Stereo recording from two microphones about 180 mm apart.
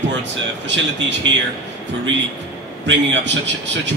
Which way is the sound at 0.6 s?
85° right.